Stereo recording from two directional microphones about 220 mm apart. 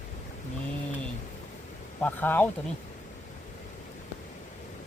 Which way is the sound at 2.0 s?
10° left (ahead or behind).